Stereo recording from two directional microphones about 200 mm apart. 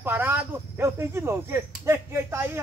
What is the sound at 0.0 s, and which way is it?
Speech, 10° right (ahead or behind).